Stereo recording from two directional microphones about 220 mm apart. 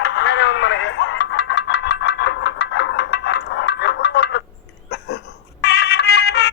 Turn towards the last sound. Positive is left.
turn(degrees=50)  # may be behind; listen again after turning